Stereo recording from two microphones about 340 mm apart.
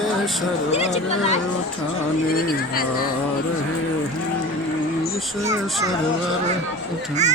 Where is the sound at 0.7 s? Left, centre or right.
Centre.